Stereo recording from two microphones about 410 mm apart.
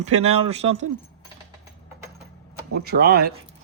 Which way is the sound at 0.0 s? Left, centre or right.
Centre.